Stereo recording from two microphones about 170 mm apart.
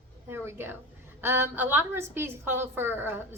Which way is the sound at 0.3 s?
15° right (ahead or behind).